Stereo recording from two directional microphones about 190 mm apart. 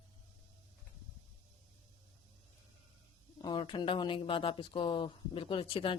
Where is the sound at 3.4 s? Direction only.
25° left (ahead or behind).